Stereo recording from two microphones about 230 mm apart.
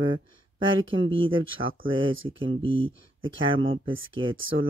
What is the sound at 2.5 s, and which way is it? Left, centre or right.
Speech, right.